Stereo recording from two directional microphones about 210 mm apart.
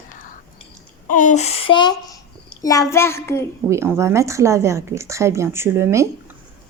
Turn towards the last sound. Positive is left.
turn(degrees=-10)  # may be behind; listen again after turning